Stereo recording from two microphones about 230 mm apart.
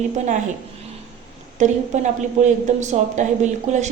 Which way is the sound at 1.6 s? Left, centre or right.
Right.